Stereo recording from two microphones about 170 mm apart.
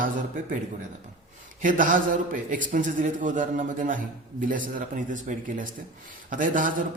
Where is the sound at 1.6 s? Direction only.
50° right (ahead or behind).